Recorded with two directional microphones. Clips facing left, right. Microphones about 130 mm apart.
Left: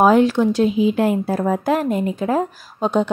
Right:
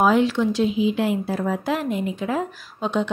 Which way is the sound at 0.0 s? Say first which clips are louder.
Left 4 dB; 45° left (ahead or behind).